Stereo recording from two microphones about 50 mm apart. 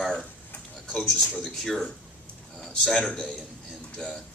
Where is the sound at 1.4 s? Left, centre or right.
Centre.